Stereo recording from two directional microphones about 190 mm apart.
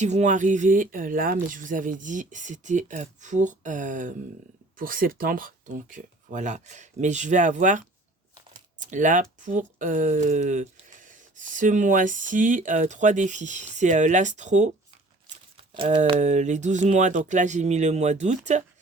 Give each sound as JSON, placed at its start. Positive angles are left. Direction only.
{"t": 0.0, "sound": "speech", "side_deg": -40}
{"t": 15.8, "sound": "speech", "side_deg": -30}